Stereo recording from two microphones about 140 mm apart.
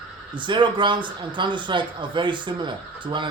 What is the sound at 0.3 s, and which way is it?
A man's voice, 35° right (ahead or behind).